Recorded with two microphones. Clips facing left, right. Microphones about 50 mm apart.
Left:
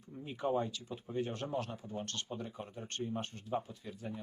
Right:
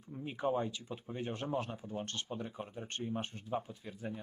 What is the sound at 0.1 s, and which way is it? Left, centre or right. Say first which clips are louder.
Speech: even; centre.